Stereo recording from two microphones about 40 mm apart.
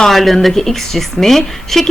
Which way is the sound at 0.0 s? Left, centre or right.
Centre.